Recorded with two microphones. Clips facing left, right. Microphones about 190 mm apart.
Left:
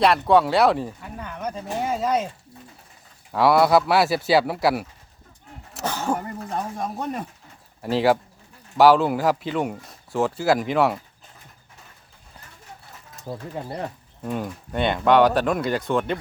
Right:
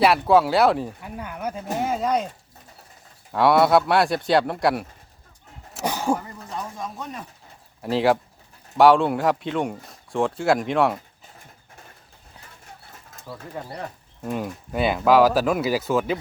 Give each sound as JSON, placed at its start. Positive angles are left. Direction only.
{"t": 0.0, "sound": "speech", "side_deg": -5}
{"t": 3.3, "sound": "speech", "side_deg": 0}
{"t": 5.8, "sound": "speech", "side_deg": -10}
{"t": 7.0, "sound": "speech", "side_deg": 55}
{"t": 7.8, "sound": "speech", "side_deg": 0}
{"t": 13.2, "sound": "speech", "side_deg": 25}
{"t": 14.3, "sound": "speech", "side_deg": -5}